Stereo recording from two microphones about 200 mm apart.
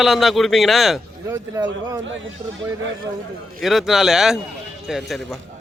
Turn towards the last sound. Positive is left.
turn(degrees=0)  # may be behind; listen again after turning